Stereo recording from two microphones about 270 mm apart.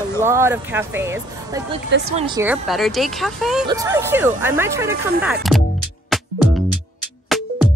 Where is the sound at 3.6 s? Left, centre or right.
Centre.